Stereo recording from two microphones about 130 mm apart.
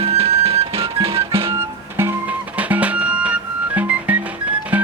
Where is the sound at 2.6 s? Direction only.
10° right (ahead or behind).